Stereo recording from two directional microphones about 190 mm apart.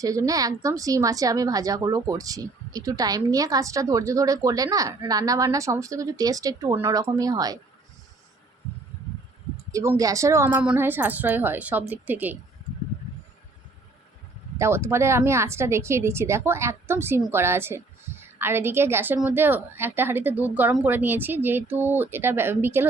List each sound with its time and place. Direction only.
0.0 s speech: 20° right (ahead or behind)
9.7 s speech: 15° right (ahead or behind)
14.6 s speech: 15° right (ahead or behind)